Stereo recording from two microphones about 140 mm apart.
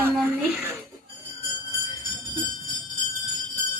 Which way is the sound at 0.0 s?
15° right (ahead or behind).